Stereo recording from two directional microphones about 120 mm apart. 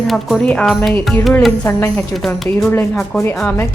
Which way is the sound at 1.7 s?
20° left (ahead or behind).